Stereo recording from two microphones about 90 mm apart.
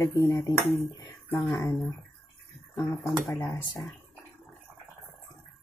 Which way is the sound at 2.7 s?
30° left (ahead or behind).